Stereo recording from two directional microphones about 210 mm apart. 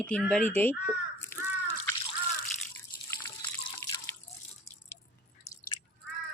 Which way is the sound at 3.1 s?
10° left (ahead or behind).